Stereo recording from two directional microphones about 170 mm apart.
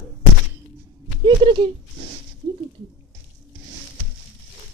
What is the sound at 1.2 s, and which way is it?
Speech, 30° right (ahead or behind).